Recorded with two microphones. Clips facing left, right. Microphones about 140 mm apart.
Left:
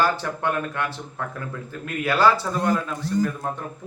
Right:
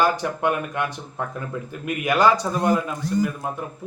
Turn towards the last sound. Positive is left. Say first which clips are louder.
# even
turn(degrees=-10)  # may be behind; listen again after turning